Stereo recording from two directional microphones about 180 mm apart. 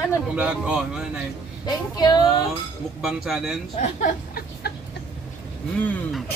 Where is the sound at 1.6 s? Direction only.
25° left (ahead or behind).